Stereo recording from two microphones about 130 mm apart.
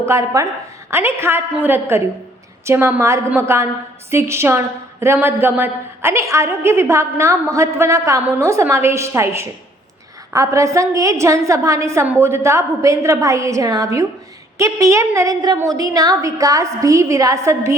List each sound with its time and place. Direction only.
0.0 s a woman's voice: 25° right (ahead or behind)